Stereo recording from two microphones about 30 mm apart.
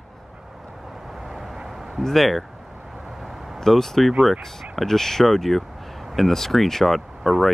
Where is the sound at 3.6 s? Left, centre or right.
Centre.